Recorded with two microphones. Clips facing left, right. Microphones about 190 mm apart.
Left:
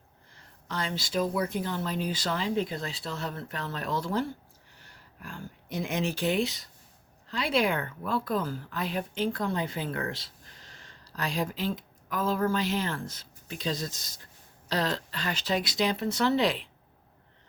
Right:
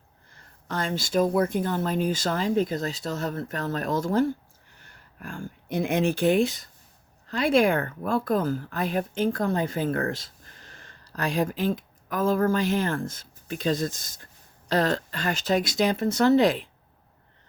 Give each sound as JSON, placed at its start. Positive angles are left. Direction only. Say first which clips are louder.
{"t": 0.3, "sound": "a woman's voice", "louder": "right 4 dB", "side_deg": -50}